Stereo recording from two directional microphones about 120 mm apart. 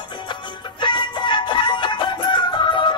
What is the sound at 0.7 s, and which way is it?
Music, 40° left (ahead or behind).